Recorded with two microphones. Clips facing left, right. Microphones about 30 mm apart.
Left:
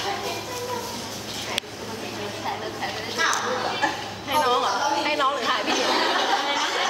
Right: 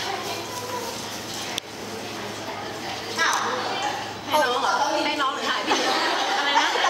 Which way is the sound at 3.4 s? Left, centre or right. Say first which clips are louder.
Left 1 dB; centre.